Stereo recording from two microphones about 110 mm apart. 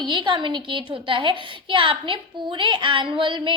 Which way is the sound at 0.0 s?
45° right (ahead or behind).